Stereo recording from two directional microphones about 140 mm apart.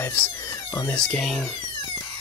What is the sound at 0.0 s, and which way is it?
Speech, 15° left (ahead or behind).